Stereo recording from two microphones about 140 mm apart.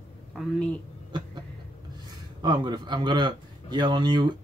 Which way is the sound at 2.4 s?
30° right (ahead or behind).